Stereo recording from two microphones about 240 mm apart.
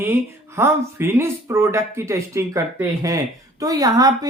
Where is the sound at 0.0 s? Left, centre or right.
Centre.